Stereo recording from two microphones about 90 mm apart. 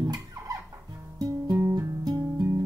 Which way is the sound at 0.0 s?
50° right (ahead or behind).